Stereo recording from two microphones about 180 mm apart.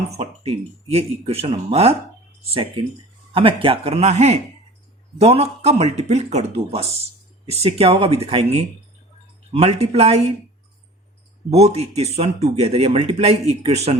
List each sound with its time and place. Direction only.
0.2 s a man's voice: 35° right (ahead or behind)
11.5 s a man's voice: 35° right (ahead or behind)